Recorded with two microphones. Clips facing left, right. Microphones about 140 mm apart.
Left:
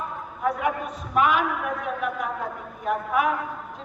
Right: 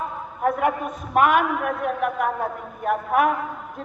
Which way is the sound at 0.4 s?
50° right (ahead or behind).